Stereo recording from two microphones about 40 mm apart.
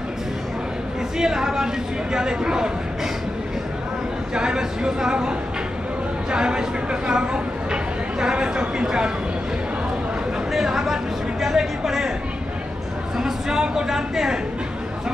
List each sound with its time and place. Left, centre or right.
1.1 s a woman's voice: centre
4.4 s speech: centre
6.3 s speech: right
10.5 s a sound: centre
13.2 s speech: centre